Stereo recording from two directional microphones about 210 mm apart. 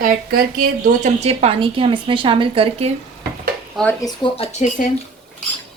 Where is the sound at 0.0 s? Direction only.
40° right (ahead or behind).